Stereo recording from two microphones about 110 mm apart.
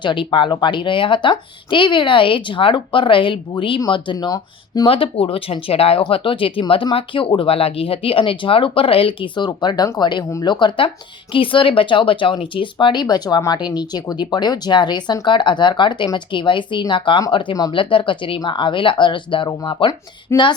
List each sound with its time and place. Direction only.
0.0 s speech: 50° left (ahead or behind)
4.9 s speech: 55° left (ahead or behind)